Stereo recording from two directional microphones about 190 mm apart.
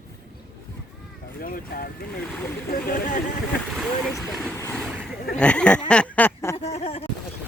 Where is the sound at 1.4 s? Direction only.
45° left (ahead or behind).